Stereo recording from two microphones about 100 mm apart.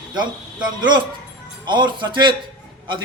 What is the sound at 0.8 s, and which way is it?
A man's voice, 50° right (ahead or behind).